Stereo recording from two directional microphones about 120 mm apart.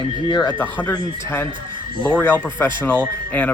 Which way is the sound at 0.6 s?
15° left (ahead or behind).